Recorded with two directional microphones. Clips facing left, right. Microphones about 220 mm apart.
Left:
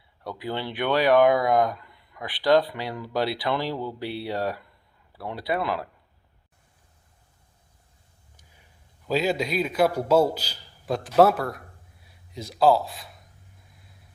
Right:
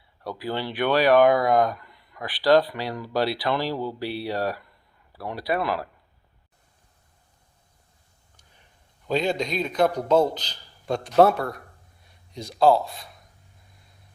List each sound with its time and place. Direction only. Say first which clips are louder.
0.3 s speech: right 2 dB; 20° left (ahead or behind)
9.0 s a man's voice: even; 5° left (ahead or behind)